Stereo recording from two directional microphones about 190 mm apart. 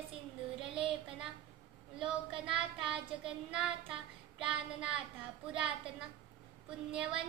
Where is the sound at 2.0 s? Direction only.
5° right (ahead or behind).